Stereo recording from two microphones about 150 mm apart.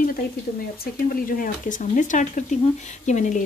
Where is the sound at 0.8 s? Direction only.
70° left (ahead or behind).